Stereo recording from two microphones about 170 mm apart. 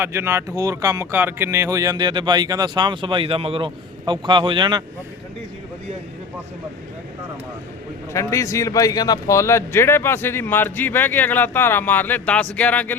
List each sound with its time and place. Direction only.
0.0 s speech: 15° right (ahead or behind)
8.1 s a man's voice: 20° left (ahead or behind)